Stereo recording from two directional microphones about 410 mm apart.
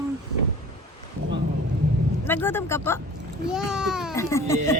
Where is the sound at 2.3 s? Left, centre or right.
Centre.